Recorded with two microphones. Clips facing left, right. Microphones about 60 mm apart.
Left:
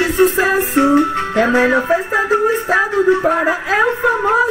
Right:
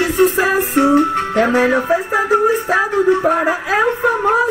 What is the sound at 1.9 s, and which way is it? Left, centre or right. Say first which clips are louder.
Speech: even; centre.